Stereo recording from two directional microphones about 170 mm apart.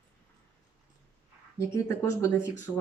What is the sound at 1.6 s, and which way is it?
Speech, 15° left (ahead or behind).